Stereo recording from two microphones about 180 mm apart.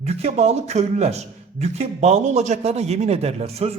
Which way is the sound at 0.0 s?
35° right (ahead or behind).